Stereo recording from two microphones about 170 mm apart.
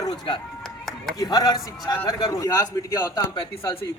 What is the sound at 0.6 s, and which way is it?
Clapping, centre (ahead or behind).